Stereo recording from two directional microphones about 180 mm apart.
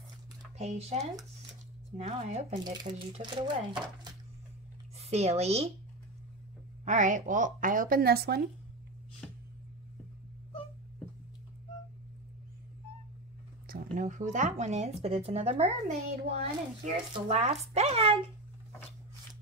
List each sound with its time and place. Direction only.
0.6 s speech: 35° right (ahead or behind)
2.5 s speech: 25° right (ahead or behind)
4.9 s speech: 35° right (ahead or behind)
6.8 s speech: 45° right (ahead or behind); by 8.4 s 60° right (ahead or behind)
13.7 s speech: 45° right (ahead or behind)